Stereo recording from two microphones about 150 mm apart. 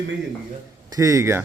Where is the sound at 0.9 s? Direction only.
20° right (ahead or behind).